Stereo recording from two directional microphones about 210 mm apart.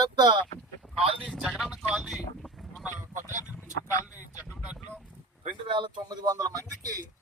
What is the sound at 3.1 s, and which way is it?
Speech, 35° right (ahead or behind).